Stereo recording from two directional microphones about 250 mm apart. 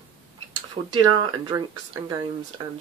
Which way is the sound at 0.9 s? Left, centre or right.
Centre.